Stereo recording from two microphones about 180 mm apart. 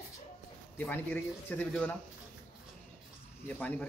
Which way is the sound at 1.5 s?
5° left (ahead or behind).